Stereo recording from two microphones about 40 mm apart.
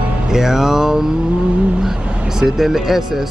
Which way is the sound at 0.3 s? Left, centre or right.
Centre.